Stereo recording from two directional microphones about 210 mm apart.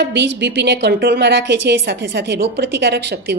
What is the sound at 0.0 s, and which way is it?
A woman's voice, 55° right (ahead or behind).